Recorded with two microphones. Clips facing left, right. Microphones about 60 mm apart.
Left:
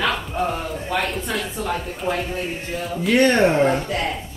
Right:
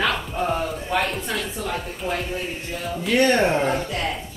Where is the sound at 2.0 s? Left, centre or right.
Centre.